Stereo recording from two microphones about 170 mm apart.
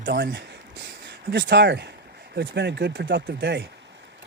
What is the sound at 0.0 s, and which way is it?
Speech, 90° right.